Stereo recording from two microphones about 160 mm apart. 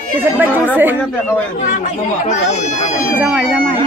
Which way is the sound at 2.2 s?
45° left (ahead or behind).